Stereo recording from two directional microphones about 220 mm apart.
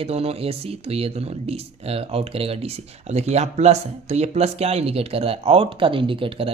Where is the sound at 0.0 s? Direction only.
25° right (ahead or behind).